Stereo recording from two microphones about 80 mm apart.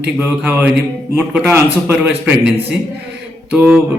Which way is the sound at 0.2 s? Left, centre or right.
Centre.